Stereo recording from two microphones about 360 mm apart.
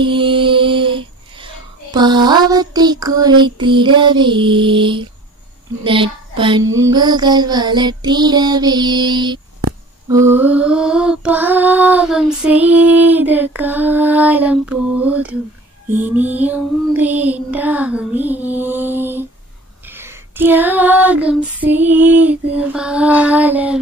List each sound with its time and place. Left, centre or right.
0.0 s child singing: centre
5.9 s a sound: centre
6.8 s child singing: centre